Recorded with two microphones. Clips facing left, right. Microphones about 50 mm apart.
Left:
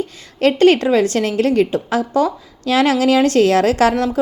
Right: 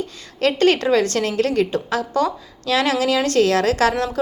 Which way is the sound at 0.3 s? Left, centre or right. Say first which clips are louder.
Left 5 dB; left.